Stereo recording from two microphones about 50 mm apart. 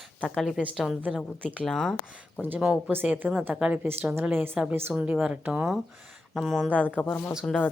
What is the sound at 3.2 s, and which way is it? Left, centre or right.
A woman's voice, right.